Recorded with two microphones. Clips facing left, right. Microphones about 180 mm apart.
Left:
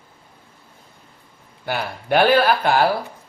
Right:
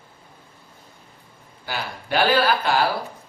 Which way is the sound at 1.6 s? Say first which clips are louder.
Left 6 dB; 55° left (ahead or behind).